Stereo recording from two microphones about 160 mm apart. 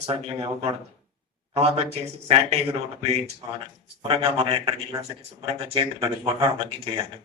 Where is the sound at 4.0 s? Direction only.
35° right (ahead or behind).